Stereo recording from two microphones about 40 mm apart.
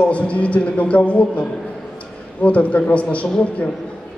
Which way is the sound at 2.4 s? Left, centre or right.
Left.